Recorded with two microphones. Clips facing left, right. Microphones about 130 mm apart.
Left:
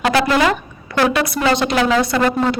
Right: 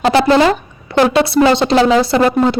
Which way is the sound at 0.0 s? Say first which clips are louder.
Right 5 dB; 30° right (ahead or behind).